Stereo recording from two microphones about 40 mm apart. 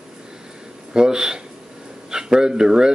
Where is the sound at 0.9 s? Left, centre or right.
Centre.